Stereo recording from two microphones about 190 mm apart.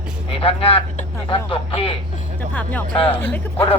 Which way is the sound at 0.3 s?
30° left (ahead or behind).